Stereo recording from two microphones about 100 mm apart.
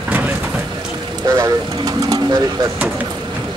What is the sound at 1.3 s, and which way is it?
Speech, 35° right (ahead or behind).